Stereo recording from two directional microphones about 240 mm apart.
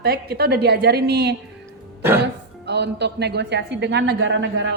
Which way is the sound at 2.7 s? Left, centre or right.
Right.